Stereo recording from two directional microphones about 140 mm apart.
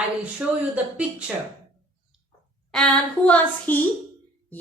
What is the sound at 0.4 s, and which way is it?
Speech, 10° right (ahead or behind).